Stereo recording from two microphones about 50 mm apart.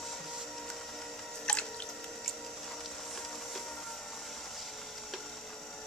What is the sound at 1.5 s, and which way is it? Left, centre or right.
Drip, centre.